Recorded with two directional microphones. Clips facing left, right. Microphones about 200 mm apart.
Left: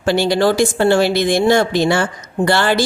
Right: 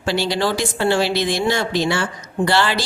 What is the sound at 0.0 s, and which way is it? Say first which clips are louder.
Speech: left 6 dB; 50° left (ahead or behind).